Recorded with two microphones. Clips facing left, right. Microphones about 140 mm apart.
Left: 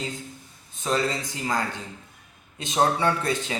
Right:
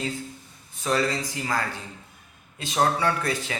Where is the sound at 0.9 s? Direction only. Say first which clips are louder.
Right 1 dB; 25° left (ahead or behind).